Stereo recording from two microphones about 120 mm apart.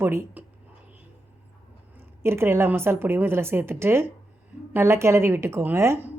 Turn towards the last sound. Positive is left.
turn(degrees=-20)  # may be behind; listen again after turning